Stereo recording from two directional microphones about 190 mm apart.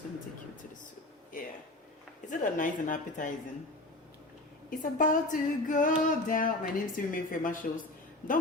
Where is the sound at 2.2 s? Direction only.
45° left (ahead or behind).